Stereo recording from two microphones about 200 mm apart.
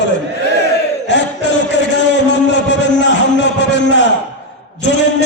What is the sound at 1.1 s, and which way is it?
Chant, 60° left (ahead or behind).